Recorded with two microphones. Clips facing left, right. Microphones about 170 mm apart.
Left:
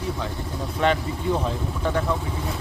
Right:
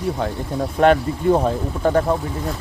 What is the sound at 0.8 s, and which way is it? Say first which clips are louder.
Speech: right 7 dB; 50° right (ahead or behind).